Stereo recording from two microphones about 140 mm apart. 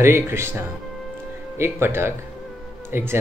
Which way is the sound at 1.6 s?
15° right (ahead or behind).